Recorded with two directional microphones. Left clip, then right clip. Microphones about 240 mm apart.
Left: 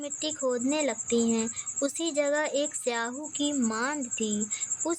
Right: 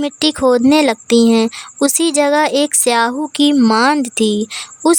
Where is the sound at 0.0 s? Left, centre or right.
Right.